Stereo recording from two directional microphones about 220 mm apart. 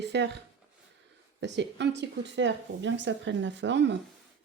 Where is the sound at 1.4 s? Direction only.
55° right (ahead or behind).